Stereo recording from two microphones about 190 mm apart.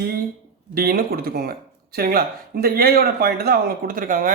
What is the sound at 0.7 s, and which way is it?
Speech, 50° right (ahead or behind).